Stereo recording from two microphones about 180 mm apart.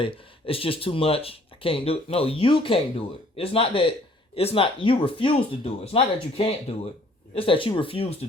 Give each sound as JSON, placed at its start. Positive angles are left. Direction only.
{"t": 0.0, "sound": "speech", "side_deg": 30}